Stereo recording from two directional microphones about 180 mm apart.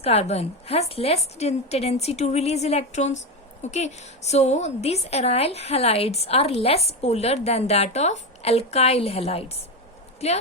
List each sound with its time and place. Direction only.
0.0 s a woman's voice: 35° left (ahead or behind)